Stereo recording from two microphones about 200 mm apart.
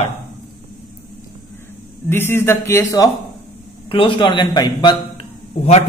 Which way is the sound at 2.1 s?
10° left (ahead or behind).